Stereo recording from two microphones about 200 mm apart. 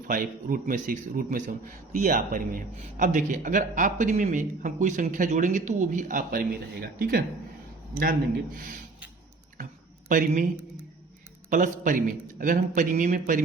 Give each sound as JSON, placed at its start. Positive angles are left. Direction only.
{"t": 0.1, "sound": "a man's voice", "side_deg": -45}
{"t": 10.1, "sound": "speech", "side_deg": -40}
{"t": 11.4, "sound": "a man's voice", "side_deg": -40}